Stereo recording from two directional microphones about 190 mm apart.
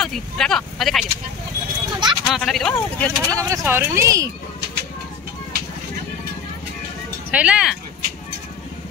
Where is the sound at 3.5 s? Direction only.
15° right (ahead or behind).